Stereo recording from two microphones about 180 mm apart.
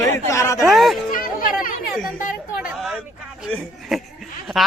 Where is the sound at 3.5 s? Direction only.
Centre (ahead or behind).